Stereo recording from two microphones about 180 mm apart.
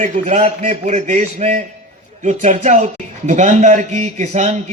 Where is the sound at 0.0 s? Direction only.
40° right (ahead or behind).